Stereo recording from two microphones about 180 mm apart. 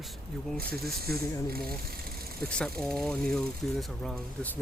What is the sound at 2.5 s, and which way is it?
Speech, 5° left (ahead or behind).